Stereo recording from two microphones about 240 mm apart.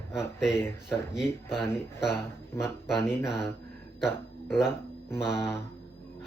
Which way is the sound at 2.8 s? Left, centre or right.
Centre.